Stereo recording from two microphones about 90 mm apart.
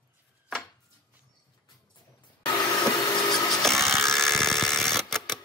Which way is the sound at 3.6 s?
5° left (ahead or behind).